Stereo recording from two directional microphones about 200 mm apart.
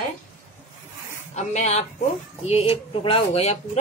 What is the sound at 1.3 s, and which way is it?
A woman's voice, 35° left (ahead or behind).